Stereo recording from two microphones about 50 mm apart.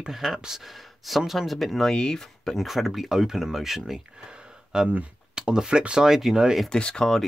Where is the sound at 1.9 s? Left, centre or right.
Centre.